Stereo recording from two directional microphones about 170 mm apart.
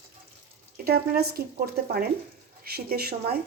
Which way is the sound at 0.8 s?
65° right (ahead or behind).